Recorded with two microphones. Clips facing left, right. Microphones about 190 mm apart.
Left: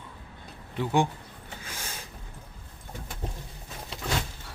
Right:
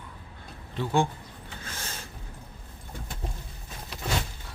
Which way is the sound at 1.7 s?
10° left (ahead or behind).